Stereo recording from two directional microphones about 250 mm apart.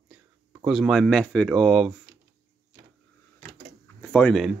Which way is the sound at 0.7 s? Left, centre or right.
Centre.